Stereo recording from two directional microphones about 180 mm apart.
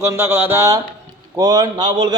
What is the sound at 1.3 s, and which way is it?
Speech, 20° right (ahead or behind).